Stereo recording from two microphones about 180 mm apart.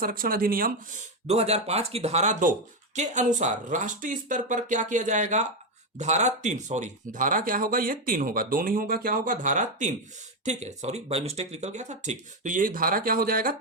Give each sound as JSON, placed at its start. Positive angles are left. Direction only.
{"t": 0.0, "sound": "speech", "side_deg": -55}
{"t": 1.3, "sound": "speech", "side_deg": -35}